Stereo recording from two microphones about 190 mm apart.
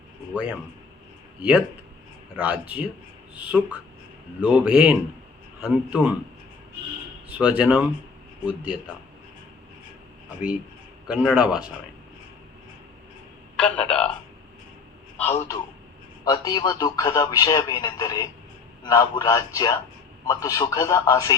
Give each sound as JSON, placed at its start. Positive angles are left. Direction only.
{"t": 1.4, "sound": "a man's voice", "side_deg": -5}
{"t": 7.3, "sound": "a man's voice", "side_deg": -5}
{"t": 11.3, "sound": "a man's voice", "side_deg": -5}
{"t": 13.6, "sound": "telephone", "side_deg": 5}
{"t": 15.2, "sound": "a man's voice", "side_deg": 10}